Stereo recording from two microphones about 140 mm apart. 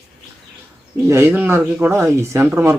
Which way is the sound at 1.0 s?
15° right (ahead or behind).